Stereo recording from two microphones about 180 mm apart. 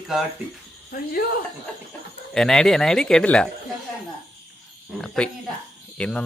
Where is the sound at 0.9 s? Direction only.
55° left (ahead or behind).